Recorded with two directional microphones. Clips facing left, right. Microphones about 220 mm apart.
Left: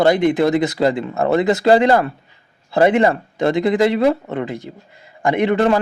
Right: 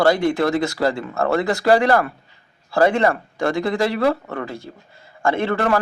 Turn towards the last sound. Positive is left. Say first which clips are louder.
# left 4 dB
turn(degrees=20)  # may be behind; listen again after turning